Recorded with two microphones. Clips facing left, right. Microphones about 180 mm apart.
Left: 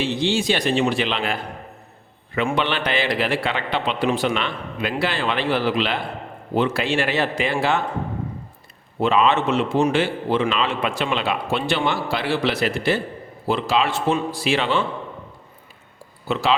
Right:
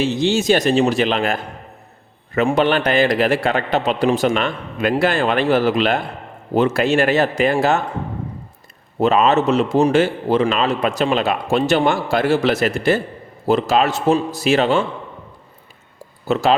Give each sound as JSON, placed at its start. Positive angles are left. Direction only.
{"t": 0.0, "sound": "a man's voice", "side_deg": -45}
{"t": 9.0, "sound": "a man's voice", "side_deg": -40}
{"t": 16.2, "sound": "speech", "side_deg": -45}